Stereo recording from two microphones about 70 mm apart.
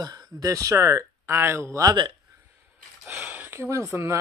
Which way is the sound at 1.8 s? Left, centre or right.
Right.